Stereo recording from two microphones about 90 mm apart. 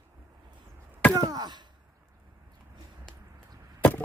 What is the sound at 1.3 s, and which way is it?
Speech, 50° right (ahead or behind).